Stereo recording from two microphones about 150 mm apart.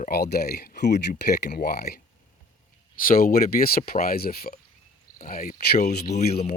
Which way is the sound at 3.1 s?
80° left.